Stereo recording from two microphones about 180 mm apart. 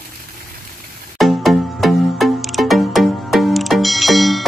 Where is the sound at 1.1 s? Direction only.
Centre (ahead or behind).